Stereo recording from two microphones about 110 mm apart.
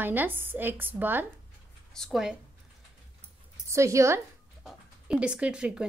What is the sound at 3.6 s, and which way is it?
Speech, 25° right (ahead or behind).